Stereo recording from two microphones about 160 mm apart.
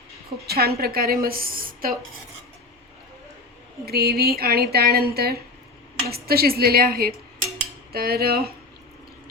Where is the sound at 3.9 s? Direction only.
75° right (ahead or behind).